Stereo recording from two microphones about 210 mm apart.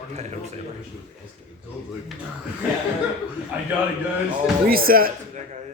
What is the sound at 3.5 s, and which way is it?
Speech, 5° right (ahead or behind).